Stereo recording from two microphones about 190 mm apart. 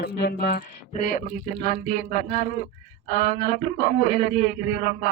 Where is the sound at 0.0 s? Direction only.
60° left (ahead or behind).